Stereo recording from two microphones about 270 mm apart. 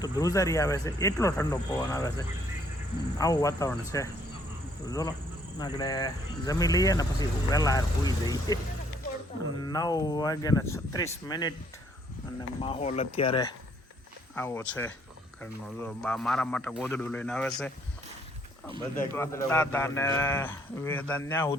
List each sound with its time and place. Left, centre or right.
0.0 s speech: centre
4.9 s speech: centre
9.6 s speech: centre
12.5 s speech: left
14.3 s a man's voice: centre
19.1 s speech: centre